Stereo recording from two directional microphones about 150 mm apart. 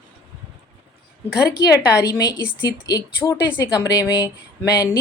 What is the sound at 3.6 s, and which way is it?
Speech, 25° left (ahead or behind).